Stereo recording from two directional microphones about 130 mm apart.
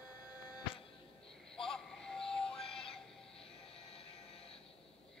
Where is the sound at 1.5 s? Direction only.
5° left (ahead or behind).